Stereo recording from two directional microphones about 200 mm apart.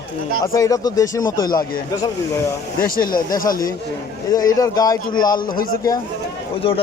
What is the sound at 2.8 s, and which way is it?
Speech, 45° left (ahead or behind).